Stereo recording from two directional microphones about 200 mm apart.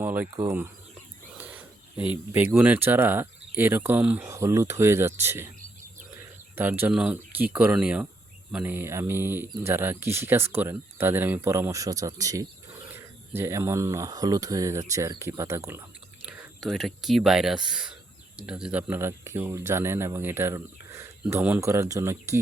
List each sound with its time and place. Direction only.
0.0 s speech: 10° right (ahead or behind)
1.4 s a sound: 10° right (ahead or behind)
2.3 s speech: 10° right (ahead or behind)
6.6 s speech: 10° right (ahead or behind)
16.2 s speech: centre (ahead or behind)